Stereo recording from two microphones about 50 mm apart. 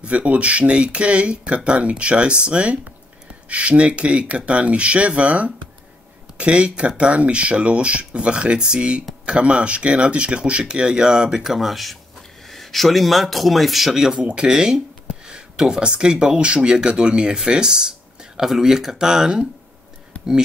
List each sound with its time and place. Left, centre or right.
0.0 s speech: right; by 19.3 s centre